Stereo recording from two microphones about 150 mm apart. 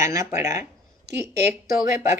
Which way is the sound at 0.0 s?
20° right (ahead or behind).